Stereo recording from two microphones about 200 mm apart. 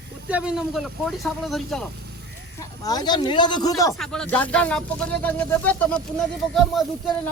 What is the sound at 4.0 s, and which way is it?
Speech, 5° left (ahead or behind).